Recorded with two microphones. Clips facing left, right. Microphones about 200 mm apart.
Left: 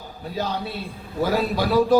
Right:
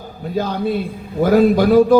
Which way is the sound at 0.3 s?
50° right (ahead or behind).